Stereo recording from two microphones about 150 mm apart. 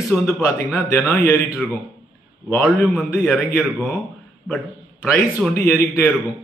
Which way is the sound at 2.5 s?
10° left (ahead or behind).